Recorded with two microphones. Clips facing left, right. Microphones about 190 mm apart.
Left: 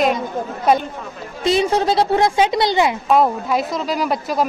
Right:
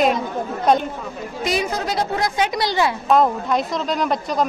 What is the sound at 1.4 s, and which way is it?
A woman's voice, 25° left (ahead or behind).